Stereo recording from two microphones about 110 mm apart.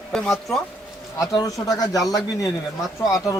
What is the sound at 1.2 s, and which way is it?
Speech, 35° left (ahead or behind).